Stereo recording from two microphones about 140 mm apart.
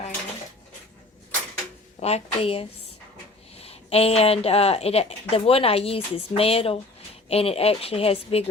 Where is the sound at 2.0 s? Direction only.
50° left (ahead or behind).